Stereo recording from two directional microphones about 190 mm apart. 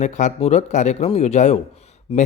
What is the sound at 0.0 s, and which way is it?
Speech, 40° left (ahead or behind).